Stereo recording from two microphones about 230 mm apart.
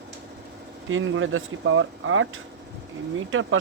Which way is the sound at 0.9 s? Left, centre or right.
Right.